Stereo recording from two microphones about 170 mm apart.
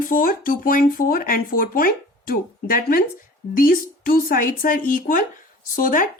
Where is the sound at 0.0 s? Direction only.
55° left (ahead or behind).